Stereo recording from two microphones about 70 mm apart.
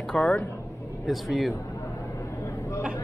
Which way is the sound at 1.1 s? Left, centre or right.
Centre.